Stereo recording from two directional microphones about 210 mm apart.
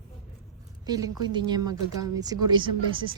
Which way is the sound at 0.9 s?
20° right (ahead or behind).